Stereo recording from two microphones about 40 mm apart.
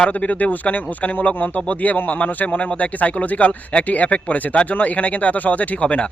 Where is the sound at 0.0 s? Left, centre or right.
Left.